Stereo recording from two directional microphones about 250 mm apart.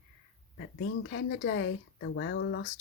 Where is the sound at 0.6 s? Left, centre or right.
Left.